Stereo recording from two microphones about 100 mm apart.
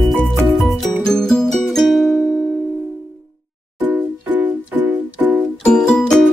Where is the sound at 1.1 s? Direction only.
5° left (ahead or behind).